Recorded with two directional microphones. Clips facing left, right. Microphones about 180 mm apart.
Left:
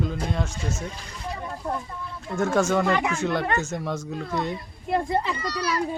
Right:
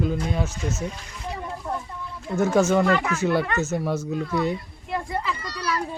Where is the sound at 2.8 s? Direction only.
15° left (ahead or behind).